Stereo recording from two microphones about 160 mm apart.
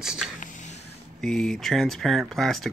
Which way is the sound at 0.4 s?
50° left (ahead or behind).